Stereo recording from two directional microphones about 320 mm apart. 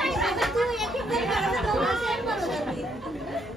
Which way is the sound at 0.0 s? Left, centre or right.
Centre.